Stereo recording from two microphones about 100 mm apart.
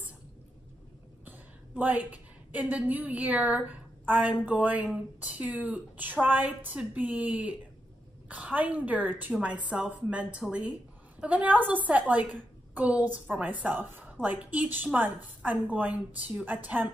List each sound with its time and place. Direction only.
1.2 s a woman's voice: 15° right (ahead or behind)